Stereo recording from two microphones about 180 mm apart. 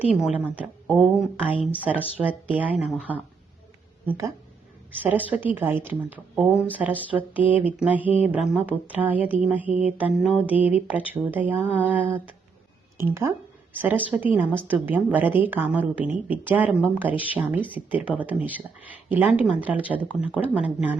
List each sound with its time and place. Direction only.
0.1 s a woman's voice: 5° right (ahead or behind)